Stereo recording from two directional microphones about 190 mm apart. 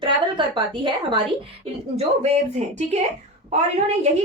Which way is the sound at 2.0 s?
35° right (ahead or behind).